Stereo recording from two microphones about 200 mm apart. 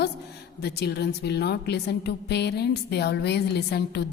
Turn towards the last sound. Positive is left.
turn(degrees=55)  # may be behind; listen again after turning